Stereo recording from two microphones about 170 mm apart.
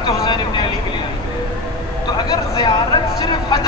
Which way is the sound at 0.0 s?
25° left (ahead or behind).